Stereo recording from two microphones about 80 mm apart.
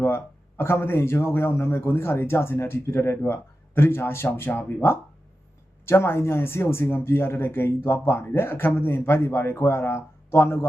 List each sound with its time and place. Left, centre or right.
0.0 s a man's voice: left